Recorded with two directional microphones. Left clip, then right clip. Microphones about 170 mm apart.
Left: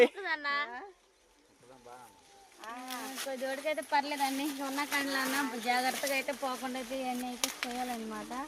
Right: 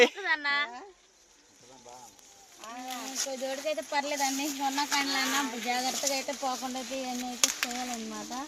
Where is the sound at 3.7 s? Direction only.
30° right (ahead or behind).